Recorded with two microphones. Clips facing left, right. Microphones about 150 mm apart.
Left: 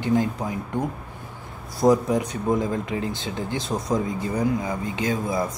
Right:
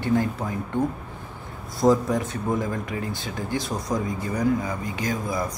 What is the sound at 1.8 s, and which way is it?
Speech, 20° left (ahead or behind).